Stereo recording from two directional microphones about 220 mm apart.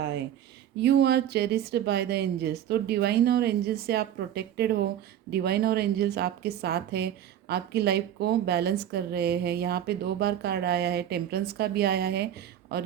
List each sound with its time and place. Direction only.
0.8 s a woman's voice: 50° right (ahead or behind)